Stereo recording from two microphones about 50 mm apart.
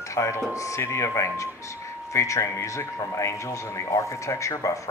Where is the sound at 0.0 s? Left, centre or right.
Left.